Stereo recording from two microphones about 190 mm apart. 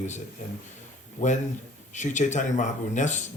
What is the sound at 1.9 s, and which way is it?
Speech, 40° left (ahead or behind).